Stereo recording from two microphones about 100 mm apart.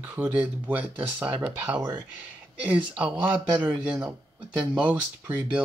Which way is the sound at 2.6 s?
15° right (ahead or behind).